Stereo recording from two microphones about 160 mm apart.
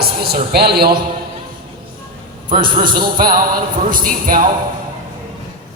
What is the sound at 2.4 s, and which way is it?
Speech, 30° right (ahead or behind).